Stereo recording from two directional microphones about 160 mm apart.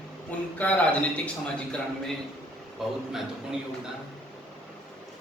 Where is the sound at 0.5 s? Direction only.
10° left (ahead or behind).